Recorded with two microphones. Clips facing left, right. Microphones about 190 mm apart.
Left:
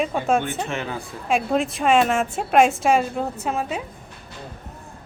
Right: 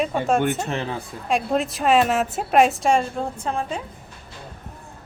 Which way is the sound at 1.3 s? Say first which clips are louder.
Left 1 dB; centre (ahead or behind).